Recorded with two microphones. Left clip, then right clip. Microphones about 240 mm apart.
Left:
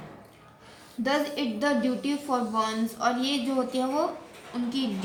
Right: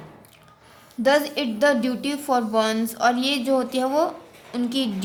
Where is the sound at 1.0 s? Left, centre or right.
Right.